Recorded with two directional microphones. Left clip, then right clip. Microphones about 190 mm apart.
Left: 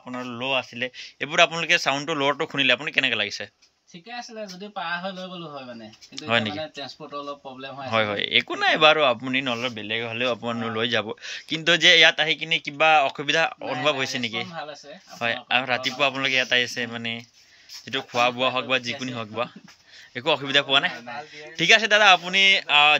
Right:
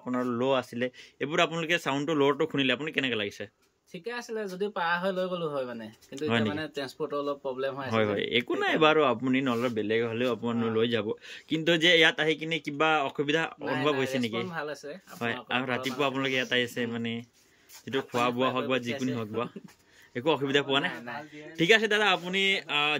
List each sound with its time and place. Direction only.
0.0 s speech: 25° right (ahead or behind)
0.8 s speech: 20° right (ahead or behind)
4.1 s speech: 25° right (ahead or behind)
6.2 s speech: 15° right (ahead or behind)